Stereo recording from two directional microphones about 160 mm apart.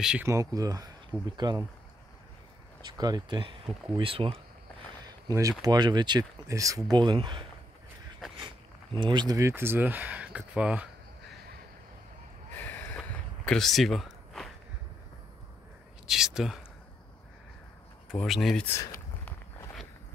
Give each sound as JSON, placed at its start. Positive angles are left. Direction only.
{"t": 0.0, "sound": "speech", "side_deg": -5}
{"t": 0.3, "sound": "speech", "side_deg": -20}
{"t": 2.9, "sound": "speech", "side_deg": -25}
{"t": 5.0, "sound": "speech", "side_deg": -20}
{"t": 8.9, "sound": "speech", "side_deg": -30}
{"t": 12.5, "sound": "a sound", "side_deg": 10}
{"t": 13.5, "sound": "speech", "side_deg": 0}
{"t": 16.1, "sound": "speech", "side_deg": -5}
{"t": 18.1, "sound": "speech", "side_deg": 0}
{"t": 18.7, "sound": "a sound", "side_deg": 15}